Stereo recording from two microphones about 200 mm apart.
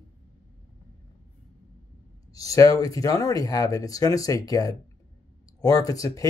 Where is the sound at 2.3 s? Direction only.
15° left (ahead or behind).